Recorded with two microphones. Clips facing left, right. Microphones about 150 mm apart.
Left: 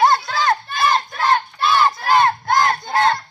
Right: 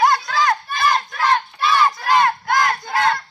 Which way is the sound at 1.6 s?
Centre (ahead or behind).